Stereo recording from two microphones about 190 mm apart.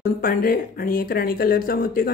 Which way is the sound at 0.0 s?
50° left (ahead or behind).